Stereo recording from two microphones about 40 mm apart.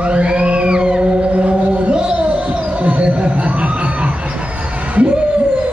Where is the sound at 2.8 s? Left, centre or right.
Right.